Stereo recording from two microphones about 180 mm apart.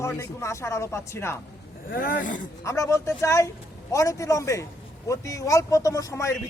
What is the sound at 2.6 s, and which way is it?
Speech, 15° left (ahead or behind).